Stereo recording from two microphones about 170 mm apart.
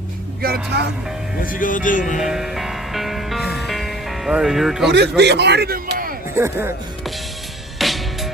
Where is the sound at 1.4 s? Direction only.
55° left (ahead or behind).